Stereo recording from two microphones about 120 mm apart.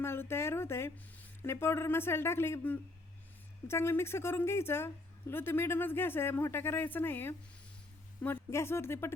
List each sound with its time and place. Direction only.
0.0 s a woman's voice: 20° left (ahead or behind)